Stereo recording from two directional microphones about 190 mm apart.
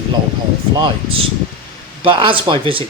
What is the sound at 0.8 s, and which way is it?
Speech, 30° right (ahead or behind).